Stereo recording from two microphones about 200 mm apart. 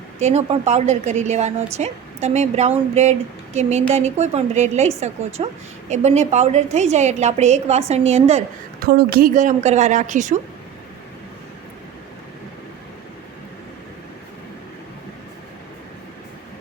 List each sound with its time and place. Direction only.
0.2 s a woman's voice: 35° right (ahead or behind)
8.8 s a woman's voice: 50° right (ahead or behind)